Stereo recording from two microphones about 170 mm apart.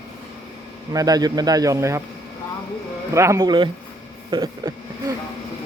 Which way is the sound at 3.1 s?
15° right (ahead or behind).